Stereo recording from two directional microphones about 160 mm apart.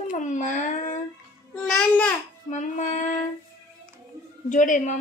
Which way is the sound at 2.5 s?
50° left (ahead or behind).